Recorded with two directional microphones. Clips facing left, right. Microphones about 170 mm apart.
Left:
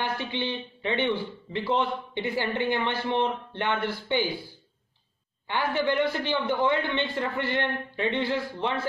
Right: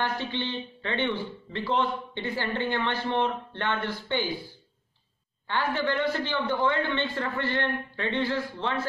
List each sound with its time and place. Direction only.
0.0 s a man's voice: 15° left (ahead or behind)
5.5 s a man's voice: 15° left (ahead or behind)